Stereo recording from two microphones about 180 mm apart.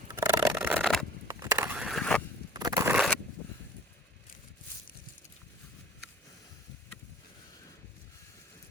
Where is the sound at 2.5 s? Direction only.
20° right (ahead or behind).